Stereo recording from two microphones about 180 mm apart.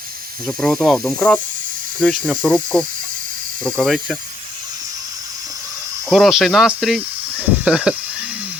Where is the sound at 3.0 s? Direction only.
50° right (ahead or behind).